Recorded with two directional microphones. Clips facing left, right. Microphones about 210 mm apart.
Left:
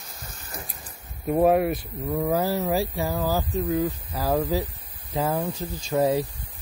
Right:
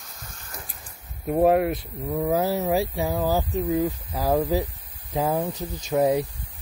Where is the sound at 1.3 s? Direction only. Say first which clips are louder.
Even; 10° right (ahead or behind).